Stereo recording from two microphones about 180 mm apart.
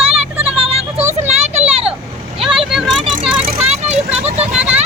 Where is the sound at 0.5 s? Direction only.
35° right (ahead or behind).